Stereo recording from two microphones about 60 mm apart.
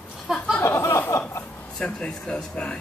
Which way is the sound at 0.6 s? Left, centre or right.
Left.